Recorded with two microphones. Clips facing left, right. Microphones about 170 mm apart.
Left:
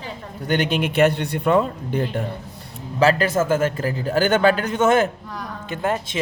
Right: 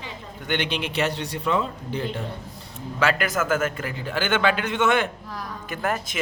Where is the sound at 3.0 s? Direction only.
35° left (ahead or behind).